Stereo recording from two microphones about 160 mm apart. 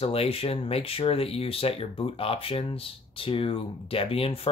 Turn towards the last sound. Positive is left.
turn(degrees=35)  # may be behind; listen again after turning